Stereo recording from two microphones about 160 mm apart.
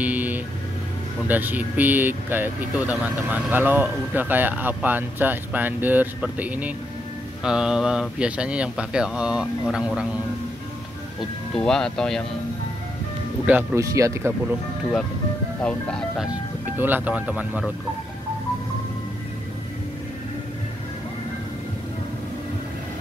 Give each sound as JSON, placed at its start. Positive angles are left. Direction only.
{"t": 0.0, "sound": "vehicle", "side_deg": -10}
{"t": 1.2, "sound": "speech", "side_deg": -10}
{"t": 11.5, "sound": "speech", "side_deg": 5}
{"t": 13.5, "sound": "speech", "side_deg": -10}
{"t": 15.6, "sound": "speech", "side_deg": 5}
{"t": 16.7, "sound": "speech", "side_deg": -10}